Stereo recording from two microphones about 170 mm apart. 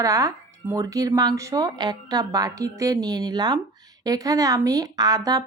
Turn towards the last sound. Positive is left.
turn(degrees=-20)  # may be behind; listen again after turning